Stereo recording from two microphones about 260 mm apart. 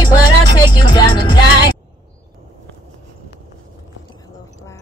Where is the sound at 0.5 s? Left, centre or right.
Centre.